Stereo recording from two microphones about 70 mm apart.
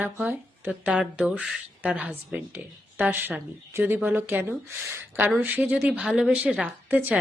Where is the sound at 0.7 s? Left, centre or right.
Centre.